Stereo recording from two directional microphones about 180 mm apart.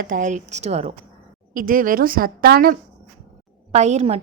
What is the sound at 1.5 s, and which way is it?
A woman's voice, 50° right (ahead or behind).